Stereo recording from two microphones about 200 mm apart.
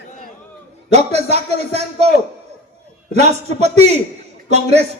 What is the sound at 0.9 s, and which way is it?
Speech, 35° right (ahead or behind).